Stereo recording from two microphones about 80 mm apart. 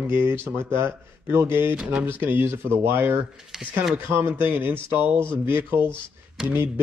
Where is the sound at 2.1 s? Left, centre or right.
Right.